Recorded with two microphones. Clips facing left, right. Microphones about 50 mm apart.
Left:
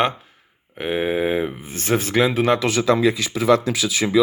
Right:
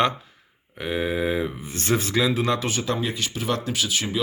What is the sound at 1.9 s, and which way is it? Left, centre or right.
Speech, left.